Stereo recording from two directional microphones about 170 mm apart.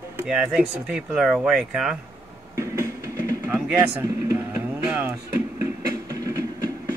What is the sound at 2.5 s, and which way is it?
Train, 20° right (ahead or behind).